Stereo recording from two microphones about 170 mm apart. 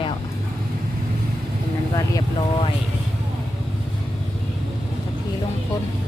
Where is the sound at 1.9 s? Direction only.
20° left (ahead or behind).